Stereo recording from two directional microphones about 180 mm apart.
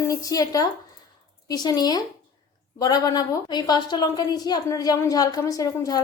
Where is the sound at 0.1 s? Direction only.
20° left (ahead or behind).